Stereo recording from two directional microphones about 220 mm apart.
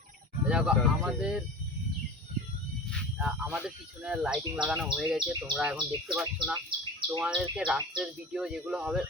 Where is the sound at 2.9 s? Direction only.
5° right (ahead or behind).